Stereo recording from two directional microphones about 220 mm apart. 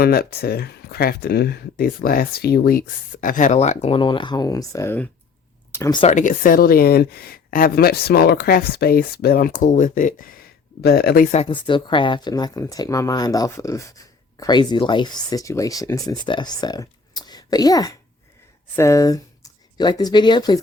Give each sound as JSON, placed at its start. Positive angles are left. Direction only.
{"t": 0.0, "sound": "speech", "side_deg": 45}